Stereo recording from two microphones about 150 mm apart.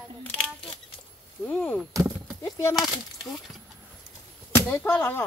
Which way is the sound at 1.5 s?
10° left (ahead or behind).